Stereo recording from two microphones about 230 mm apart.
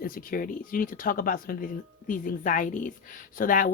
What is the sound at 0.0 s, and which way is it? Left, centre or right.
A woman's voice, left.